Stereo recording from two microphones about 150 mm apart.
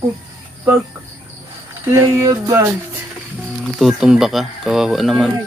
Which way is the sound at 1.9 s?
20° right (ahead or behind).